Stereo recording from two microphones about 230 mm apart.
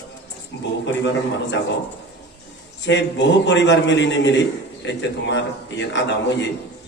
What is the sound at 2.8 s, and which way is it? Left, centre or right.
A man's voice, left.